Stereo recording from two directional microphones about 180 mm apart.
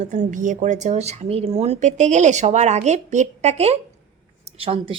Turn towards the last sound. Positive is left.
turn(degrees=-30)  # may be behind; listen again after turning